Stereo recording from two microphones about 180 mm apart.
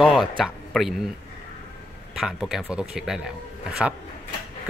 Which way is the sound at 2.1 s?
Centre (ahead or behind).